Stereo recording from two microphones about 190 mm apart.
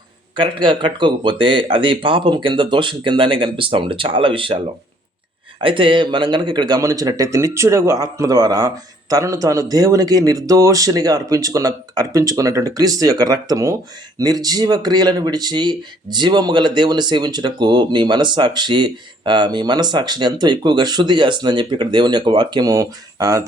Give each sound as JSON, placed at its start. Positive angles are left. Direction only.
{"t": 0.3, "sound": "speech", "side_deg": -25}